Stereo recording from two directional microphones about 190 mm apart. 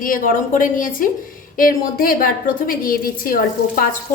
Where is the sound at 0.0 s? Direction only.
45° left (ahead or behind).